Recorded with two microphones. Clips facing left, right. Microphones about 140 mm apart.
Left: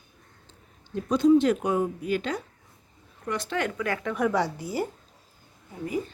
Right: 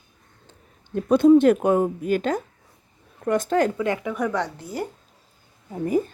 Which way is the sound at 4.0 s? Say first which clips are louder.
Even; centre (ahead or behind).